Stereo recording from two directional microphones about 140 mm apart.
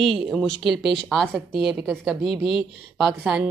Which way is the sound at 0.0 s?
Centre (ahead or behind).